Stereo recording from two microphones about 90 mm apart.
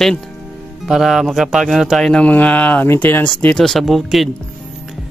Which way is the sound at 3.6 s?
Centre (ahead or behind).